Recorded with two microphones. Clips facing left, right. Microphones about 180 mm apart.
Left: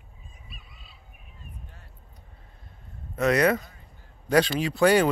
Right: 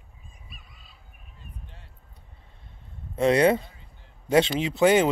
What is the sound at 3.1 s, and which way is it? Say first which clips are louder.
Speech: right 2 dB; 30° right (ahead or behind).